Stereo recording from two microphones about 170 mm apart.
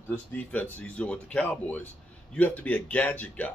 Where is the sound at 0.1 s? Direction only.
10° left (ahead or behind).